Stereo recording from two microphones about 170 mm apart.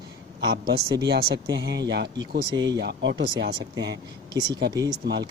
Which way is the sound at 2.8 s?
85° right.